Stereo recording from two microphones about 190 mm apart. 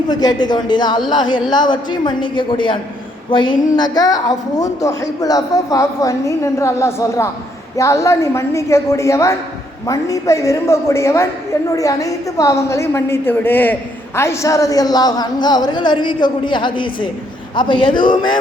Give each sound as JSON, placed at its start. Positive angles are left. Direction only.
{"t": 0.1, "sound": "a woman's voice", "side_deg": 20}